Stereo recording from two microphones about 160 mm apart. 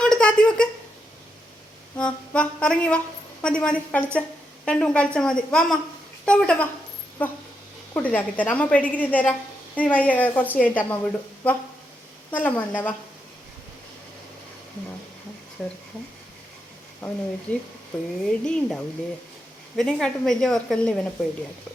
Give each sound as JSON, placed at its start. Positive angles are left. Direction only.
{"t": 0.0, "sound": "a sound", "side_deg": 5}
{"t": 2.0, "sound": "a woman's voice", "side_deg": 5}
{"t": 15.6, "sound": "speech", "side_deg": 5}
{"t": 17.5, "sound": "a woman's voice", "side_deg": 10}